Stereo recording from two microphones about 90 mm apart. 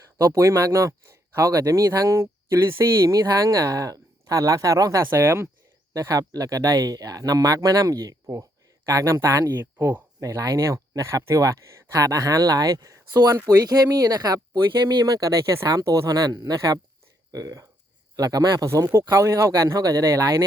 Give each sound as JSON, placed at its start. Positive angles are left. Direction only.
{"t": 0.2, "sound": "speech", "side_deg": -35}
{"t": 5.0, "sound": "speech", "side_deg": -30}
{"t": 5.9, "sound": "speech", "side_deg": -40}
{"t": 9.5, "sound": "speech", "side_deg": -25}
{"t": 10.2, "sound": "speech", "side_deg": -40}